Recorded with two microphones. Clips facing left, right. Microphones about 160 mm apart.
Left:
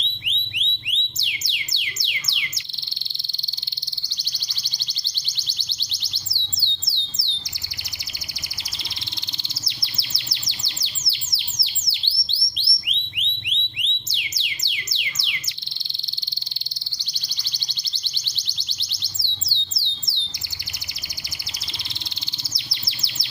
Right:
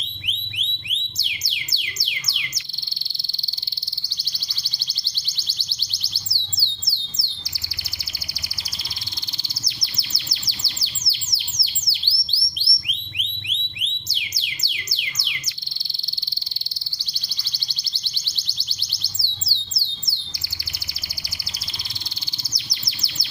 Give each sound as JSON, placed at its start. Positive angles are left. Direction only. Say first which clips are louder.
{"t": 0.3, "sound": "alarm", "louder": "even", "side_deg": 20}
{"t": 1.5, "sound": "music", "louder": "left 1 dB", "side_deg": 25}
{"t": 5.1, "sound": "music", "louder": "even", "side_deg": 15}
{"t": 9.6, "sound": "bird", "louder": "even", "side_deg": 25}
{"t": 13.1, "sound": "music", "louder": "left 1 dB", "side_deg": 20}
{"t": 18.0, "sound": "music", "louder": "even", "side_deg": 15}
{"t": 22.5, "sound": "bird", "louder": "even", "side_deg": 25}